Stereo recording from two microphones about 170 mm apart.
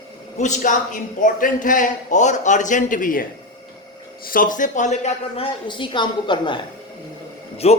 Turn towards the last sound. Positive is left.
turn(degrees=40)  # may be behind; listen again after turning